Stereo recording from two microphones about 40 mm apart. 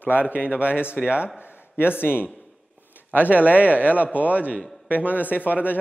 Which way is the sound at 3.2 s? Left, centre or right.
Right.